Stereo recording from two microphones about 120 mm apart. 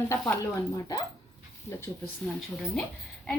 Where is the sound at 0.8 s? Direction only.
30° left (ahead or behind).